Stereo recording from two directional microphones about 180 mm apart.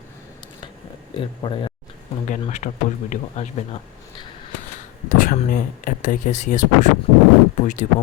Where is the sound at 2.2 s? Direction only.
45° left (ahead or behind).